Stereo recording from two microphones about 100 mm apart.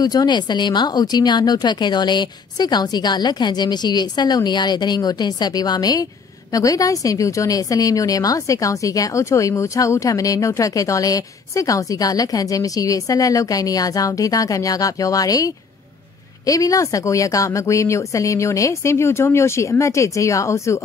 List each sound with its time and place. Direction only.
0.0 s a woman's voice: 40° left (ahead or behind)